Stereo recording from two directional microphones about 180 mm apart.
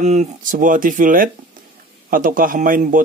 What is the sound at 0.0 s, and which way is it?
Speech, 40° right (ahead or behind).